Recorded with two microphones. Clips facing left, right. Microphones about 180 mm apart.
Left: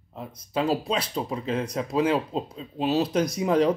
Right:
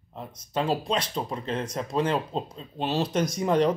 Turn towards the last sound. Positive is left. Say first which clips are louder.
# left 1 dB
turn(degrees=5)  # may be behind; listen again after turning